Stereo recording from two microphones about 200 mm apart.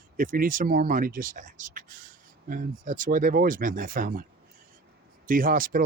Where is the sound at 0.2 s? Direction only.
45° right (ahead or behind).